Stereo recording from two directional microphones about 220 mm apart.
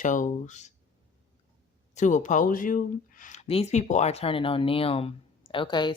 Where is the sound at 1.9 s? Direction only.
35° left (ahead or behind).